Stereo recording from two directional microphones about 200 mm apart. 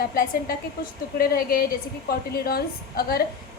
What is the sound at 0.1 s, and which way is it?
A woman's voice, 45° left (ahead or behind).